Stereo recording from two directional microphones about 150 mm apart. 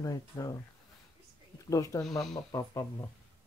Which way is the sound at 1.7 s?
20° left (ahead or behind).